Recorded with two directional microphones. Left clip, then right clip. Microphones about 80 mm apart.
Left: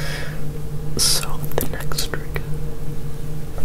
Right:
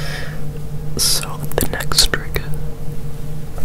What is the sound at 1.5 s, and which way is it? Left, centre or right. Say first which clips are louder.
Whispering: right 7 dB; right.